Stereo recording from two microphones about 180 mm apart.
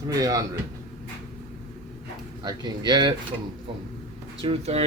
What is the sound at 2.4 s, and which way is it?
Speech, 25° right (ahead or behind).